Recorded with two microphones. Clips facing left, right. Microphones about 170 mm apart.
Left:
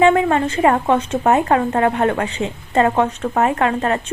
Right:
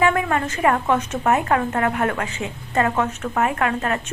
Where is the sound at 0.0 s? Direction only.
25° left (ahead or behind).